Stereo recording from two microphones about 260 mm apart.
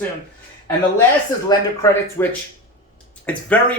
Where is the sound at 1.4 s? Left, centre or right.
Centre.